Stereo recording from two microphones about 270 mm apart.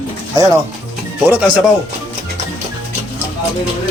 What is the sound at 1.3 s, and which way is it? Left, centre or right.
Speech, centre.